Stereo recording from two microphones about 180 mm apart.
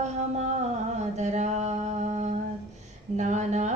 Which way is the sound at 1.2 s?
40° right (ahead or behind).